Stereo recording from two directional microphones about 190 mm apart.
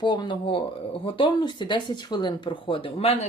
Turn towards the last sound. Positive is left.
turn(degrees=30)  # may be behind; listen again after turning